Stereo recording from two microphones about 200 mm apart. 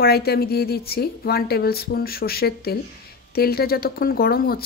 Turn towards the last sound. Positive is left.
turn(degrees=50)  # may be behind; listen again after turning